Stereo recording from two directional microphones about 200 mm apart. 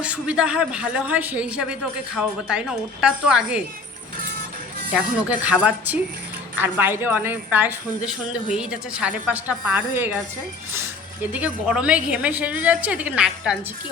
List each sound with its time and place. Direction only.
0.0 s a man's voice: 5° right (ahead or behind)
4.9 s a woman's voice: 5° right (ahead or behind)
11.3 s a woman's voice: 5° right (ahead or behind)